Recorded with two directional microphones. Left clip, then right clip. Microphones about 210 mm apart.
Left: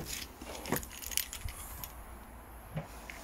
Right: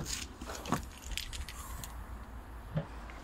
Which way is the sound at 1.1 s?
45° left (ahead or behind).